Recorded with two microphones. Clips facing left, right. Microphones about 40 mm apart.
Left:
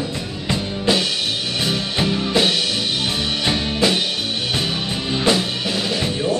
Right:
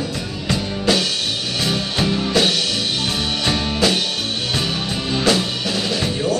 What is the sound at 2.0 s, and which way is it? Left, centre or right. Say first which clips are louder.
Music: right 1 dB; centre.